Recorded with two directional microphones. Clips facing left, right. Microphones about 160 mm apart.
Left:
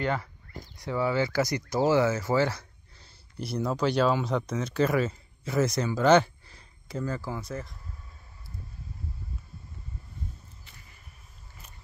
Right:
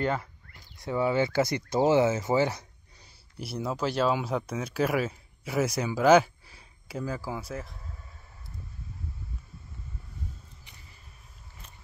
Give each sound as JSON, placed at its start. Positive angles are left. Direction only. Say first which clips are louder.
{"t": 0.7, "sound": "speech", "louder": "right 1 dB", "side_deg": -25}
{"t": 3.3, "sound": "speech", "louder": "left 3 dB", "side_deg": -5}